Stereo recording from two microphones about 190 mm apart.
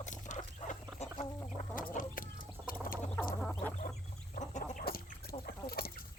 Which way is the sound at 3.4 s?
5° left (ahead or behind).